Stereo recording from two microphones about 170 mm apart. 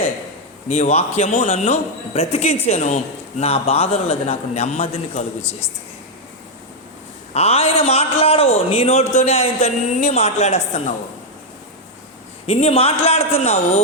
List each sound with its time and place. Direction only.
0.7 s a man's voice: 40° left (ahead or behind)
7.3 s a man's voice: 40° left (ahead or behind)
12.5 s a man's voice: 40° left (ahead or behind)